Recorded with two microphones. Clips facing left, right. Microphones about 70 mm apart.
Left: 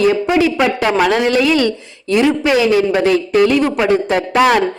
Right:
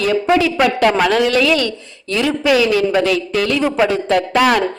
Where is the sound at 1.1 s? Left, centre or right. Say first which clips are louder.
Left 1 dB; left.